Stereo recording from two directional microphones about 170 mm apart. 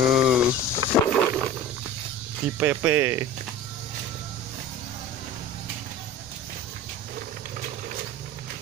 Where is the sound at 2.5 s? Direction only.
10° right (ahead or behind).